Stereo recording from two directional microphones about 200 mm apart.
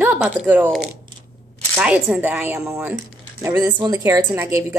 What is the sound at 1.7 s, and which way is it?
A woman's voice, 5° right (ahead or behind).